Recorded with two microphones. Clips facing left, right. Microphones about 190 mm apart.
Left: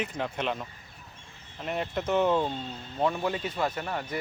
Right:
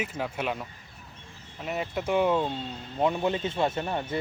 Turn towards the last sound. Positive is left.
turn(degrees=-25)  # may be behind; listen again after turning